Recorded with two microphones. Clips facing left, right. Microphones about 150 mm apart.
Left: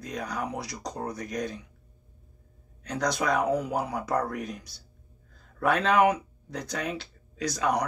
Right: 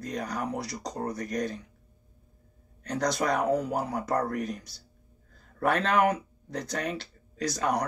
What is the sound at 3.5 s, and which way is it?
Speech, 10° left (ahead or behind).